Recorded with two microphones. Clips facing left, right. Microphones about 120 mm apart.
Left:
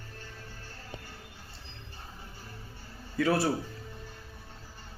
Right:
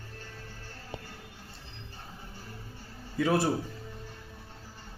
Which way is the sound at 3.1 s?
20° right (ahead or behind).